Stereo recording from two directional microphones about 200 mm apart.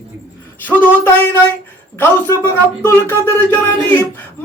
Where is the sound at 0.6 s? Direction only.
10° left (ahead or behind).